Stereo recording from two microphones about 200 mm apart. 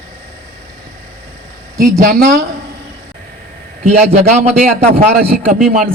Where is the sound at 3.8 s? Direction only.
35° right (ahead or behind).